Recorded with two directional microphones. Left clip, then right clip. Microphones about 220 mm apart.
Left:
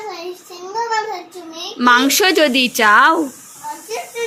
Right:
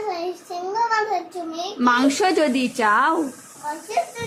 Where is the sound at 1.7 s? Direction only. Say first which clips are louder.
Left 6 dB; 5° left (ahead or behind).